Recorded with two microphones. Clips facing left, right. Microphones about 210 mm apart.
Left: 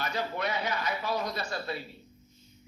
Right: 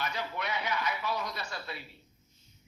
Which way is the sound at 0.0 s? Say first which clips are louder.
Left 4 dB; 35° left (ahead or behind).